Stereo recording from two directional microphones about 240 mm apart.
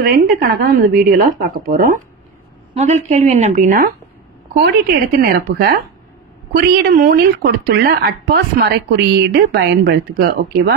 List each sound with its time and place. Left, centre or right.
0.0 s speech: right